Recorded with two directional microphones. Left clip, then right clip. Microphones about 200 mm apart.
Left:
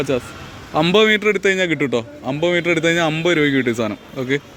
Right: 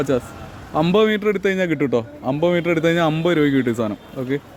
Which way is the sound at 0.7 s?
10° right (ahead or behind).